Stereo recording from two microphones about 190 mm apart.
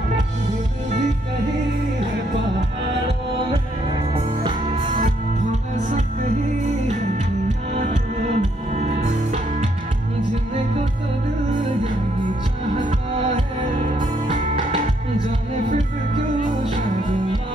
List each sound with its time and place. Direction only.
4.1 s music: 30° right (ahead or behind)
7.4 s music: 35° right (ahead or behind)
12.8 s music: 40° right (ahead or behind)